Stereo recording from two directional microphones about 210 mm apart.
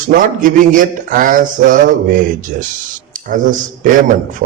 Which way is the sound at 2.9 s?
40° right (ahead or behind).